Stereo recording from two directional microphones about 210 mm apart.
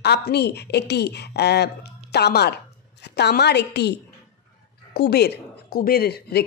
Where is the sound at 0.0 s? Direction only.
50° left (ahead or behind).